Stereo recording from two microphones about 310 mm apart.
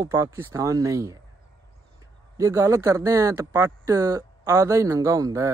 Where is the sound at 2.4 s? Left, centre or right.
Centre.